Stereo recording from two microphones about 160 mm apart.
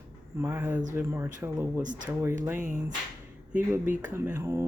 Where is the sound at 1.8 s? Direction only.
55° right (ahead or behind).